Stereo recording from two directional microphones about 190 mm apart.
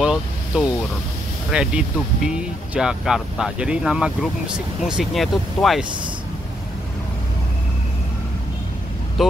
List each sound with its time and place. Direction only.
0.0 s vehicle: 5° right (ahead or behind)
1.5 s speech: 5° right (ahead or behind)
9.2 s speech: centre (ahead or behind)